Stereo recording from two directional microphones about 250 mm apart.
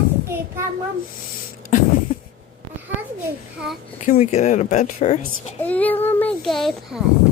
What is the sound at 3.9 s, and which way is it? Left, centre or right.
Speech, left.